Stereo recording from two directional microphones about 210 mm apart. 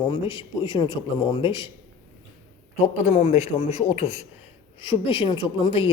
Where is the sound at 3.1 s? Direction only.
30° left (ahead or behind).